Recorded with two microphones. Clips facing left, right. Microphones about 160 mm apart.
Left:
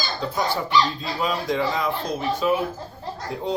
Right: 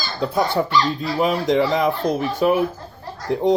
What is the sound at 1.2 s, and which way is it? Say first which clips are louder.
Speech: right 6 dB; 65° right (ahead or behind).